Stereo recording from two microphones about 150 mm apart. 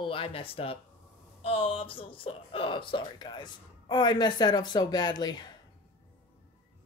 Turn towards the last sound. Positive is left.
turn(degrees=30)  # may be behind; listen again after turning